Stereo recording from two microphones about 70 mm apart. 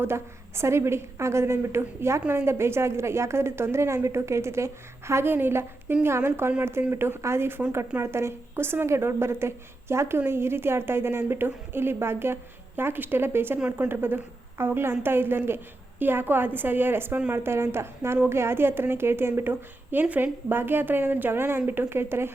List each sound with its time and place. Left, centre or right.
0.0 s a woman's voice: right
13.6 s speech: right
13.8 s a woman's voice: right